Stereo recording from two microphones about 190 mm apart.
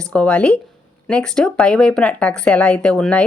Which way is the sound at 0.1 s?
5° left (ahead or behind).